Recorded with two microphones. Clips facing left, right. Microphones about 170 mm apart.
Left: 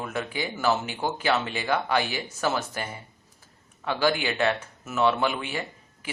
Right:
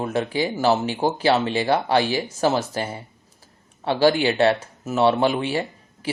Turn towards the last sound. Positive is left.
turn(degrees=-35)  # may be behind; listen again after turning